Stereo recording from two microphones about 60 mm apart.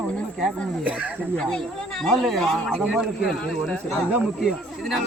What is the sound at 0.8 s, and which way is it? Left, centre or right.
Speech, right.